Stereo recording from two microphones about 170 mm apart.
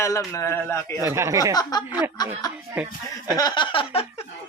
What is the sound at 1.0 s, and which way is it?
Speech, 15° right (ahead or behind).